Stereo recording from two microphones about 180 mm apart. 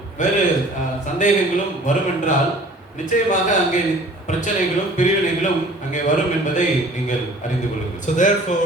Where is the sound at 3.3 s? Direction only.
45° left (ahead or behind).